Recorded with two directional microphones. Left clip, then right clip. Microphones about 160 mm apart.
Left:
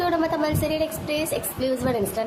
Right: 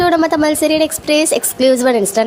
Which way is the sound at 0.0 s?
40° right (ahead or behind).